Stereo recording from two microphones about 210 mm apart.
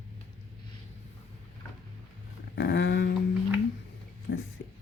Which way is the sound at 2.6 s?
55° left (ahead or behind).